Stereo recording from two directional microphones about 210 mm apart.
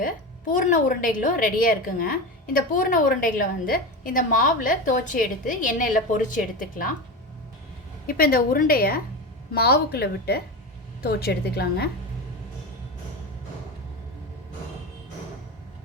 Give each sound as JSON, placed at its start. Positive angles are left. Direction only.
{"t": 0.0, "sound": "a woman's voice", "side_deg": 40}
{"t": 8.0, "sound": "a woman's voice", "side_deg": 45}